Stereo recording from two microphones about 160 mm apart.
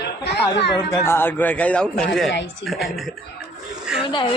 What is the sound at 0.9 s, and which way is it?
Speech, 15° left (ahead or behind).